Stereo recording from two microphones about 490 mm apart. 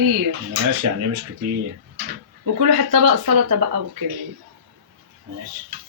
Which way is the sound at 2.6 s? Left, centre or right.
Right.